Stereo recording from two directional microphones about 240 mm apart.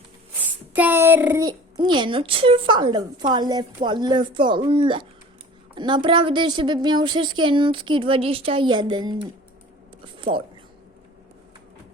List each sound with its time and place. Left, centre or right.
0.3 s a woman's voice: centre